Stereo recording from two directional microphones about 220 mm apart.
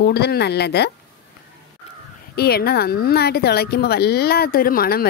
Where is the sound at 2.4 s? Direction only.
45° left (ahead or behind).